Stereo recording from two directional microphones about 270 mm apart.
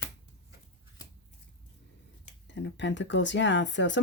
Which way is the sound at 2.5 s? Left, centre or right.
Left.